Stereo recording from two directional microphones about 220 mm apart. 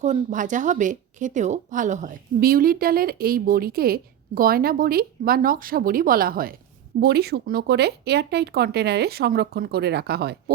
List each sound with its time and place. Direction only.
0.0 s a woman's voice: 35° right (ahead or behind)